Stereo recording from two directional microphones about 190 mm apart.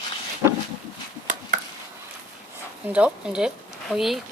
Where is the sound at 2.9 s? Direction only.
5° right (ahead or behind).